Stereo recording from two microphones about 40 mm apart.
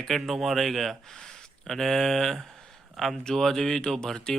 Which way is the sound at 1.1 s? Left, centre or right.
Centre.